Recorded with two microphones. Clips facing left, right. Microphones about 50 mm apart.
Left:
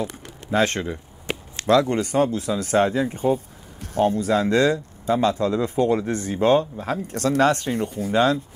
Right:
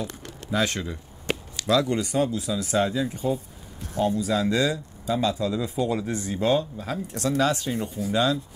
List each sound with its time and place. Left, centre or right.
0.0 s a sound: left
0.6 s speech: left
1.3 s chop: centre
1.6 s speech: left